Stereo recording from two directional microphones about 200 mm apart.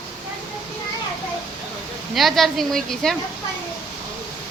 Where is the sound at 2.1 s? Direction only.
Centre (ahead or behind).